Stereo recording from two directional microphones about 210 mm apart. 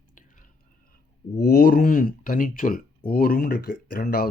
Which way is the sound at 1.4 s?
50° left (ahead or behind).